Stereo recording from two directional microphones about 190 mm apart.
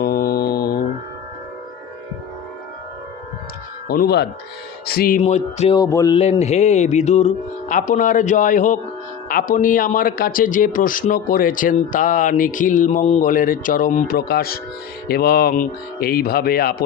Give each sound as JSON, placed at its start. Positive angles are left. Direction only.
{"t": 0.0, "sound": "mantra", "side_deg": 55}
{"t": 3.8, "sound": "speech", "side_deg": 55}
{"t": 5.2, "sound": "speech", "side_deg": 35}
{"t": 5.7, "sound": "speech", "side_deg": 20}
{"t": 6.1, "sound": "speech", "side_deg": 35}